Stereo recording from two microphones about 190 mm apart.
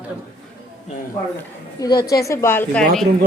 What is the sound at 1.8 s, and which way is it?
A woman's voice, 20° left (ahead or behind).